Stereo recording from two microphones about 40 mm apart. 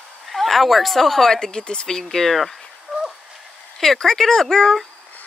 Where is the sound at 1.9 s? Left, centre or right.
Centre.